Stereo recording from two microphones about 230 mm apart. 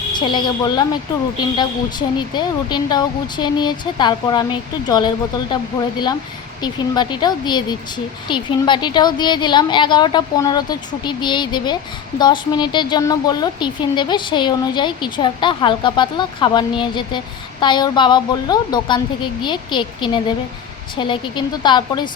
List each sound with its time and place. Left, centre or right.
0.1 s a woman's voice: centre
6.6 s a woman's voice: centre